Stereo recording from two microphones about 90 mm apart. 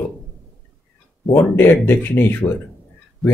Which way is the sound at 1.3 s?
25° left (ahead or behind).